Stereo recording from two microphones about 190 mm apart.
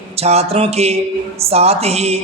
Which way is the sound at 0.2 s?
35° right (ahead or behind).